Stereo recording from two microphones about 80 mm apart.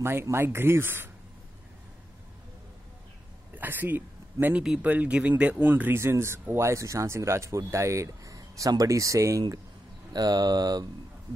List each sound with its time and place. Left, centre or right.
0.0 s speech: right
3.5 s speech: right
5.9 s speech: right
10.1 s speech: right